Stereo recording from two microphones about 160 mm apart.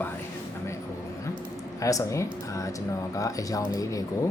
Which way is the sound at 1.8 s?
20° left (ahead or behind).